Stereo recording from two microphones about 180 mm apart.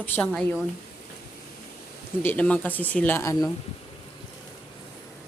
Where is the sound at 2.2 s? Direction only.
10° left (ahead or behind).